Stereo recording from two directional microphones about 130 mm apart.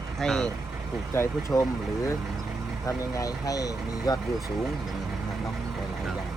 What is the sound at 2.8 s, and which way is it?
Speech, 25° left (ahead or behind).